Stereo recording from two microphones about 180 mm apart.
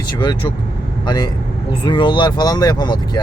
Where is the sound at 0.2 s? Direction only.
25° left (ahead or behind).